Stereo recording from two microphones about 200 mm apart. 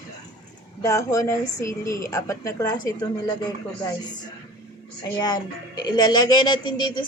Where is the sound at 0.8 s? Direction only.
15° left (ahead or behind).